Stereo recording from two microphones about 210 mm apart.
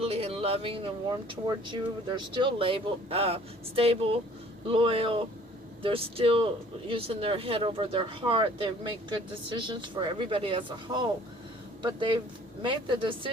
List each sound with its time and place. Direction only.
0.0 s speech: 30° right (ahead or behind)